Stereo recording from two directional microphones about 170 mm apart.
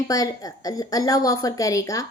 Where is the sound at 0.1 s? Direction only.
20° left (ahead or behind).